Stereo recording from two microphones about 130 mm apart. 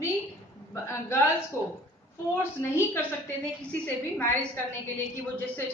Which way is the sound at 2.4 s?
20° left (ahead or behind).